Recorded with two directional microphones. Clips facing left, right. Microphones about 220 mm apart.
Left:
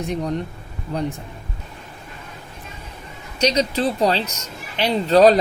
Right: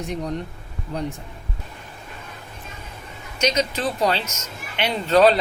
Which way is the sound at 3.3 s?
35° left (ahead or behind).